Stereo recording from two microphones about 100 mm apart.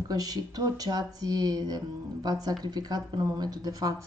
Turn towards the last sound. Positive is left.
turn(degrees=-35)  # may be behind; listen again after turning